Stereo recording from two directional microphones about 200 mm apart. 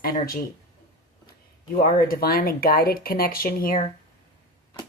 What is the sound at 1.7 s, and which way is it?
Speech, 45° left (ahead or behind).